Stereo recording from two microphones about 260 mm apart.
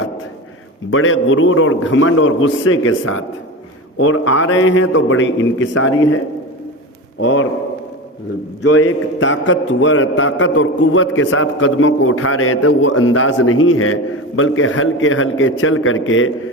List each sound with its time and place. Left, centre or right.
0.9 s a man's voice: left
7.2 s a man's voice: left
8.6 s a man's voice: left